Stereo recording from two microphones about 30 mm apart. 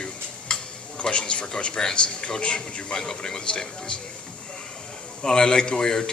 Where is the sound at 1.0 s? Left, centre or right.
Left.